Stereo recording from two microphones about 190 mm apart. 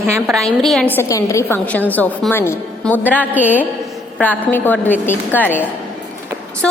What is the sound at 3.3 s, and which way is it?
Speech, 10° right (ahead or behind).